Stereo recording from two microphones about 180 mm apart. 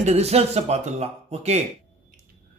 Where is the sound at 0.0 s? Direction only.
35° right (ahead or behind).